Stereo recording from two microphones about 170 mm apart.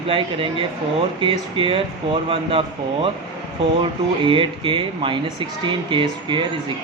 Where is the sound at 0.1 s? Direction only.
30° right (ahead or behind).